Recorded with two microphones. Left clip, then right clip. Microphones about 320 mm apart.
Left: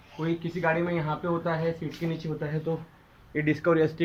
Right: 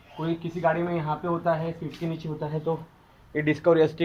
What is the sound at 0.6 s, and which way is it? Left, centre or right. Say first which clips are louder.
Speech: right 2 dB; centre.